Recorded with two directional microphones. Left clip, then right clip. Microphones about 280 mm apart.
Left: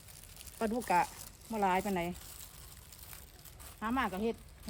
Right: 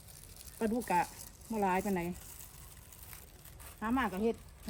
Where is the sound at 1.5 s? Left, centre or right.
Centre.